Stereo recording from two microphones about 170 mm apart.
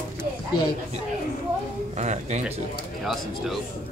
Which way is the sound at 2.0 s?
45° right (ahead or behind).